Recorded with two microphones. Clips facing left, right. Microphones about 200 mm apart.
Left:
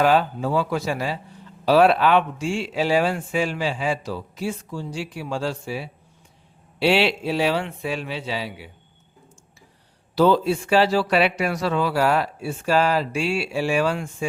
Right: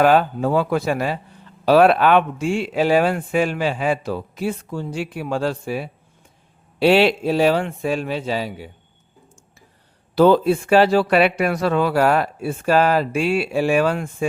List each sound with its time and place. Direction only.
0.0 s a man's voice: 55° right (ahead or behind)
10.2 s speech: 55° right (ahead or behind)